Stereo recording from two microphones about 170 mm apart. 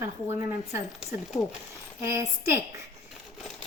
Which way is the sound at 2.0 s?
15° right (ahead or behind).